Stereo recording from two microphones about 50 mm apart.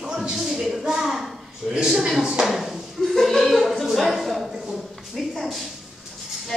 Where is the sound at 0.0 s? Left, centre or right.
Centre.